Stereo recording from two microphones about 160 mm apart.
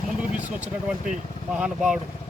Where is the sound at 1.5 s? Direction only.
5° right (ahead or behind).